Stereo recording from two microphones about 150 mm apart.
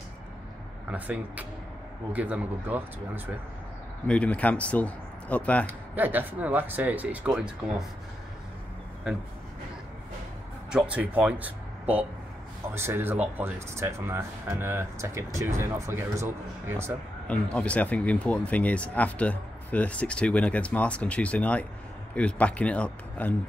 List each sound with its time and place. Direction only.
0.8 s speech: 10° right (ahead or behind)
4.1 s speech: 10° left (ahead or behind)
5.7 s speech: 10° right (ahead or behind)
10.7 s speech: 10° right (ahead or behind)
17.3 s speech: 10° left (ahead or behind)